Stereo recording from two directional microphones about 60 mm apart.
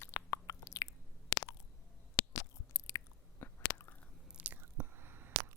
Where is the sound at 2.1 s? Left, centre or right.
Left.